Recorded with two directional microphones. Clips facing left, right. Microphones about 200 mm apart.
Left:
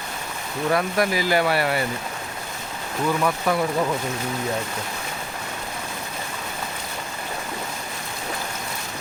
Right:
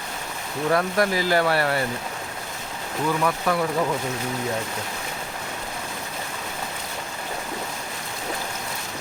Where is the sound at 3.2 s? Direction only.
15° left (ahead or behind).